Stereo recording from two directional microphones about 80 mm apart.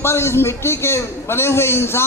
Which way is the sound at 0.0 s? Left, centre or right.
Left.